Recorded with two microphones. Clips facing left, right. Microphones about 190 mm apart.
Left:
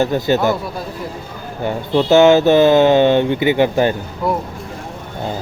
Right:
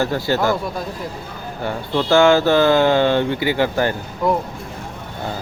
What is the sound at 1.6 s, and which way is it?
Speech, 20° left (ahead or behind).